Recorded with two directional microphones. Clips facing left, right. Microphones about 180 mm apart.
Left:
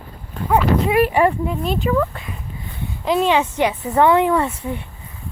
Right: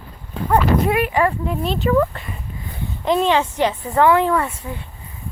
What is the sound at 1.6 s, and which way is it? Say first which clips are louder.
Speech: right 3 dB; centre (ahead or behind).